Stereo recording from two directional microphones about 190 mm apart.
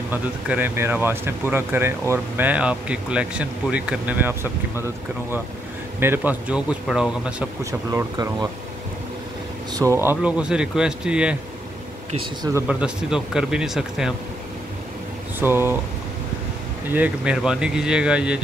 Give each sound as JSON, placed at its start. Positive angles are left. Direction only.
{"t": 0.1, "sound": "speech", "side_deg": -10}
{"t": 5.9, "sound": "speech", "side_deg": -10}
{"t": 7.9, "sound": "speech", "side_deg": -20}
{"t": 9.8, "sound": "speech", "side_deg": -15}
{"t": 12.5, "sound": "speech", "side_deg": -5}
{"t": 15.3, "sound": "speech", "side_deg": -10}
{"t": 16.9, "sound": "speech", "side_deg": -5}